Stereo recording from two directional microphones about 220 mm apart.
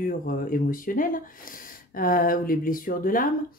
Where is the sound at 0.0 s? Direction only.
40° left (ahead or behind).